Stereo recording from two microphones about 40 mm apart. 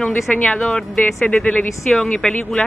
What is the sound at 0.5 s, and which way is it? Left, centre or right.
Speech, centre.